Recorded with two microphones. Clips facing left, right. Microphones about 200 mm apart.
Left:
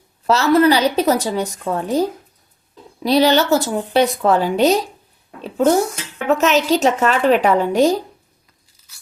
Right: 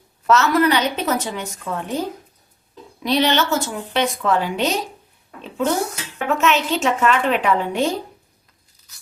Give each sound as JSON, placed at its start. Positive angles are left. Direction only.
{"t": 0.3, "sound": "a woman's voice", "side_deg": 30}
{"t": 5.4, "sound": "a sound", "side_deg": 40}
{"t": 6.2, "sound": "a woman's voice", "side_deg": 40}